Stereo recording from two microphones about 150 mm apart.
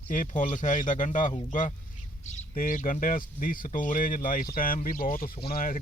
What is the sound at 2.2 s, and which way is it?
Speech, 50° left (ahead or behind).